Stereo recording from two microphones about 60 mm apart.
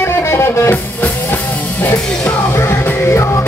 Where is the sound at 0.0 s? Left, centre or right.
Left.